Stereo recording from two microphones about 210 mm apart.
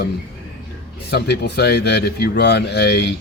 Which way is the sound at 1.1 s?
50° left (ahead or behind).